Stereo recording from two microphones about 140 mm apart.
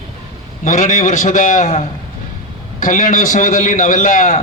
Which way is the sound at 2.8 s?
65° left (ahead or behind).